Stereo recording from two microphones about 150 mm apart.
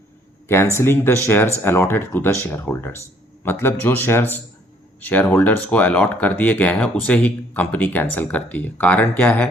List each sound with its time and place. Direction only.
0.4 s speech: 15° left (ahead or behind)